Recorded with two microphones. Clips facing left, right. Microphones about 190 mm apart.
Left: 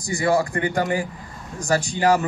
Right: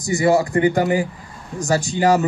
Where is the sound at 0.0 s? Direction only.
20° right (ahead or behind).